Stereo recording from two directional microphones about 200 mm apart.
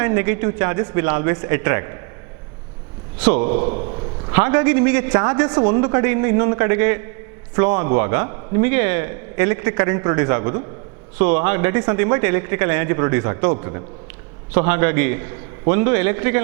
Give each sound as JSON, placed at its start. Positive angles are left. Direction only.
{"t": 0.0, "sound": "a man's voice", "side_deg": -15}
{"t": 3.2, "sound": "a man's voice", "side_deg": -10}
{"t": 3.7, "sound": "a man's voice", "side_deg": -35}
{"t": 4.3, "sound": "a man's voice", "side_deg": -15}